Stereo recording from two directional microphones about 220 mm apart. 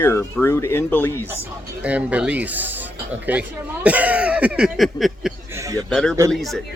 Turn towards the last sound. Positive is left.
turn(degrees=0)  # may be behind; listen again after turning